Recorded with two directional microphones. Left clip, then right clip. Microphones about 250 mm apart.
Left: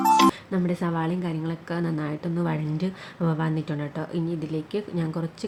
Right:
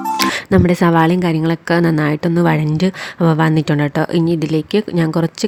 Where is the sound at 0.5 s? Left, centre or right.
Right.